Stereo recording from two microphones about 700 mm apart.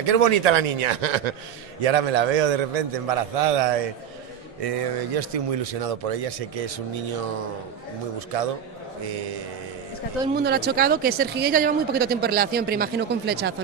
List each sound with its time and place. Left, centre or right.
0.0 s a man's voice: right
9.0 s speech: right
10.2 s speech: centre